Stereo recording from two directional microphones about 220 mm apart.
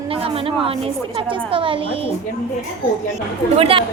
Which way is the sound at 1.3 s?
25° right (ahead or behind).